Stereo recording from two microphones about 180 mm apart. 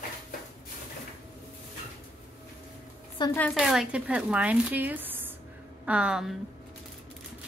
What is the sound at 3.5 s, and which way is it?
Speech, centre (ahead or behind).